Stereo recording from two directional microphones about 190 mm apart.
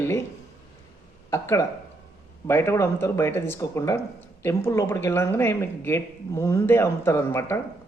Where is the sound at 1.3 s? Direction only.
15° left (ahead or behind).